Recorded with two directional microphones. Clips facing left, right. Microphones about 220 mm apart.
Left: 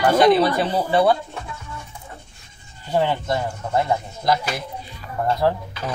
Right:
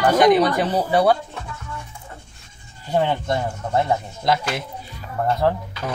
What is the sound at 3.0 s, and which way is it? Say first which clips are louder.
Speech: even; 20° right (ahead or behind).